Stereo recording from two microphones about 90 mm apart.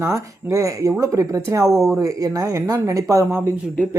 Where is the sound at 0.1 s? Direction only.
35° right (ahead or behind).